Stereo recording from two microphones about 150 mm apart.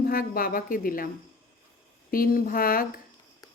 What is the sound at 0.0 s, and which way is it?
Speech, 75° left (ahead or behind).